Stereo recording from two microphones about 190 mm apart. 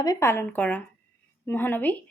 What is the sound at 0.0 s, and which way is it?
A woman's voice, 15° left (ahead or behind).